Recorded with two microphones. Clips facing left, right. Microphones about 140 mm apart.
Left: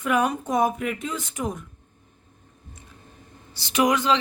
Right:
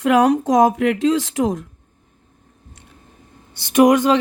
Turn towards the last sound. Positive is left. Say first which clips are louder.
# right 8 dB
turn(degrees=-50)  # may be behind; listen again after turning